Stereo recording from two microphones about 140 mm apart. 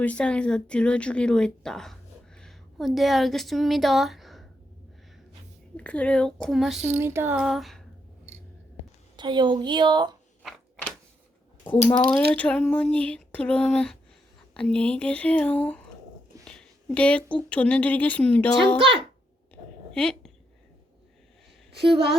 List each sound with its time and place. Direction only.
0.0 s speech: 10° left (ahead or behind)
5.7 s speech: 10° left (ahead or behind)
6.8 s a sound: 15° right (ahead or behind)
7.3 s speech: centre (ahead or behind)
9.1 s a woman's voice: 35° right (ahead or behind)
11.9 s speech: 45° left (ahead or behind)
12.1 s a woman's voice: 10° left (ahead or behind)
19.9 s a sound: 5° left (ahead or behind)